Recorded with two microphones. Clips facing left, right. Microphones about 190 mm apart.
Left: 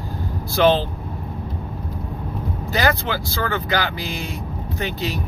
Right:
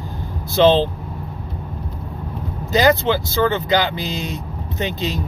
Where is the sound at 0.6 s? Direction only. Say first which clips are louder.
Right 3 dB; 25° right (ahead or behind).